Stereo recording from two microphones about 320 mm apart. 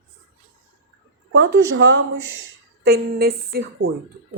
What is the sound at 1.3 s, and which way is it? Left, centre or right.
Speech, right.